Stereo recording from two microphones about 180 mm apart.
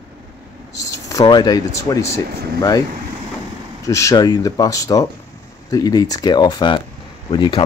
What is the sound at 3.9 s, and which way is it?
Speech, 20° left (ahead or behind).